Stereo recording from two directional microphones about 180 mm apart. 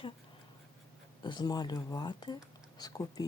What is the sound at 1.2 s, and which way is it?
Speech, 25° left (ahead or behind).